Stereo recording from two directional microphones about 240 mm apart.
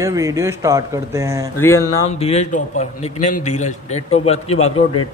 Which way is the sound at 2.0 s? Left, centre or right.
Left.